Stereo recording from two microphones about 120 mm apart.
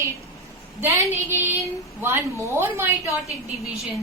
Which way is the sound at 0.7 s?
20° right (ahead or behind).